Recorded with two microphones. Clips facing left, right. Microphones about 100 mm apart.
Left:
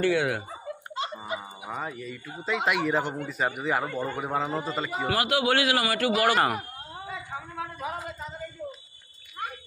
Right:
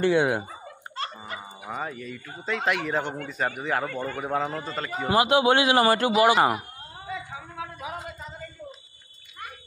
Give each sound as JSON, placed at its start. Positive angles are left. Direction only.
{"t": 0.0, "sound": "a man's voice", "side_deg": -25}
{"t": 0.9, "sound": "music", "side_deg": 15}
{"t": 1.7, "sound": "speech", "side_deg": 0}
{"t": 3.9, "sound": "a man's voice", "side_deg": 30}
{"t": 4.2, "sound": "a man's voice", "side_deg": 5}
{"t": 5.0, "sound": "a man's voice", "side_deg": -25}
{"t": 7.5, "sound": "a sound", "side_deg": -5}